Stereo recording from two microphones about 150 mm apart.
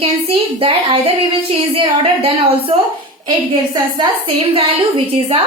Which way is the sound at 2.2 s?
40° right (ahead or behind).